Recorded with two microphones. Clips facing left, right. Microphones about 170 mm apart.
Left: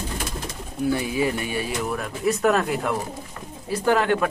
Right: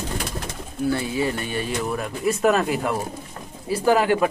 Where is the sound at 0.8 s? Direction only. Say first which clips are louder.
Even; 15° left (ahead or behind).